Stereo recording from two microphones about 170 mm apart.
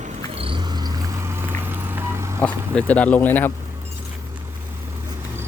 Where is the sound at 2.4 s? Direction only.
5° left (ahead or behind).